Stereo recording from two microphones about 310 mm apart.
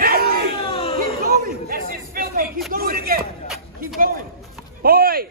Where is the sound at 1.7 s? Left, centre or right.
Right.